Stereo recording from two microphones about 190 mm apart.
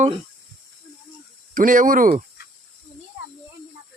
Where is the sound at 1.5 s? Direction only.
45° right (ahead or behind).